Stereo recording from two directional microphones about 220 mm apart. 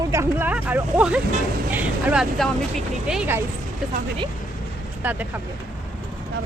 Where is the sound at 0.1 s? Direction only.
10° right (ahead or behind).